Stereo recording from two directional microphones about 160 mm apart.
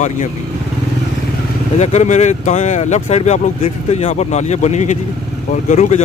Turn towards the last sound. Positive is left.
turn(degrees=45)  # may be behind; listen again after turning